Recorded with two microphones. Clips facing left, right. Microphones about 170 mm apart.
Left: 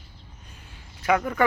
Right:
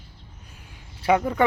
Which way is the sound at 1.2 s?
20° right (ahead or behind).